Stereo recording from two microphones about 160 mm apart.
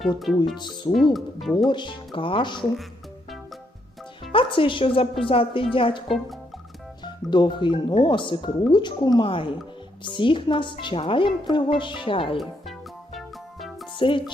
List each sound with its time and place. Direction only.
0.2 s speech: centre (ahead or behind)
0.5 s speech: 30° left (ahead or behind)
1.1 s speech: centre (ahead or behind)
1.5 s speech: 30° left (ahead or behind)
4.3 s a woman's voice: 35° left (ahead or behind)
7.0 s a woman's voice: 30° left (ahead or behind)
13.1 s music: centre (ahead or behind)
13.9 s speech: 30° left (ahead or behind)